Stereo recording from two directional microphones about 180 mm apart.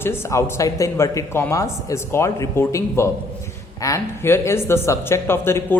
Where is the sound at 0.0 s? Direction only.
15° left (ahead or behind).